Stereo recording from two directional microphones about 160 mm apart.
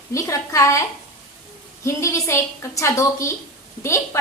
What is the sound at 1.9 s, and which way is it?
A woman's voice, 20° left (ahead or behind).